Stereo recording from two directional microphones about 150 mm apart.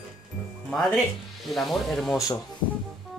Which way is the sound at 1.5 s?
Centre (ahead or behind).